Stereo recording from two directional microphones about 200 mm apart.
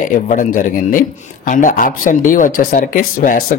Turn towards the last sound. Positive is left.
turn(degrees=45)  # may be behind; listen again after turning